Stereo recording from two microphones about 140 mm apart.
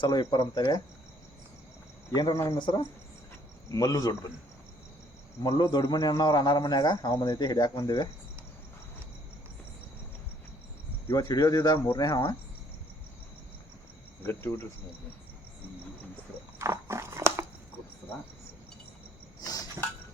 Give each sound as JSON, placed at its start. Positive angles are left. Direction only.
{"t": 0.0, "sound": "speech", "side_deg": 30}
{"t": 2.1, "sound": "a man's voice", "side_deg": 25}
{"t": 5.4, "sound": "a man's voice", "side_deg": 25}
{"t": 11.1, "sound": "a man's voice", "side_deg": 20}
{"t": 14.3, "sound": "cricket", "side_deg": 15}
{"t": 16.6, "sound": "biting", "side_deg": -20}
{"t": 19.4, "sound": "a sound", "side_deg": 25}